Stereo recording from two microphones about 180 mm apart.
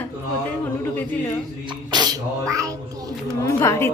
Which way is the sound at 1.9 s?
20° right (ahead or behind).